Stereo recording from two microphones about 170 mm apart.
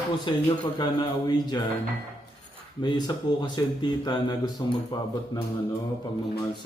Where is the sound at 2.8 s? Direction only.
25° left (ahead or behind).